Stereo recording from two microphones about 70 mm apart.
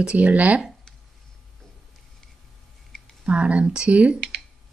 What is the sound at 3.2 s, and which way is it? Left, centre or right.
Speech, centre.